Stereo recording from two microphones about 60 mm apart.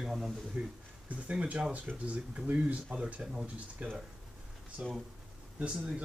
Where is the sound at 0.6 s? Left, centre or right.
Right.